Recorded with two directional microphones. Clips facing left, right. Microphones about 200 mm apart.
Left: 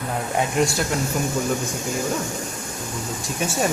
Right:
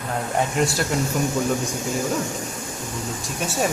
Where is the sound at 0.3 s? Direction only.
Centre (ahead or behind).